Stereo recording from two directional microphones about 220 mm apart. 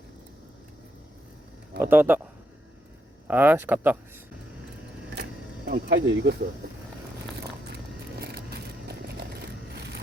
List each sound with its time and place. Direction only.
1.8 s speech: 10° right (ahead or behind)
3.2 s speech: 10° right (ahead or behind)
5.6 s speech: 45° right (ahead or behind)
7.7 s vehicle: 45° right (ahead or behind)